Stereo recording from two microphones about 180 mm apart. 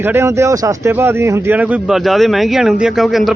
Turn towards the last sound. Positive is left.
turn(degrees=0)  # may be behind; listen again after turning